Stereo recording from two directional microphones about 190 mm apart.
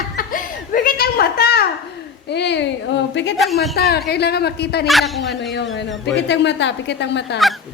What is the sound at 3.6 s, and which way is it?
A man's voice, 55° left (ahead or behind).